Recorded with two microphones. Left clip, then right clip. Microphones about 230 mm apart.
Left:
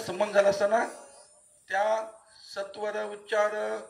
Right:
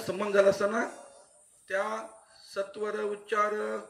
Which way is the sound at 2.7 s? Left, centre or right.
Left.